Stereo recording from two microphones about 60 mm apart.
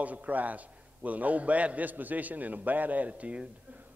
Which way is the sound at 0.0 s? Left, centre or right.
Right.